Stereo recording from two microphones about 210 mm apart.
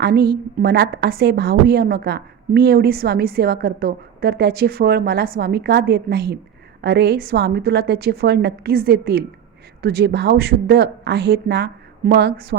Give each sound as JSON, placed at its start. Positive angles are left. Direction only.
{"t": 0.0, "sound": "a woman's voice", "side_deg": -50}